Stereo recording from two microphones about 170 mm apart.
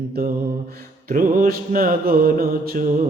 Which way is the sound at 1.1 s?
55° right (ahead or behind).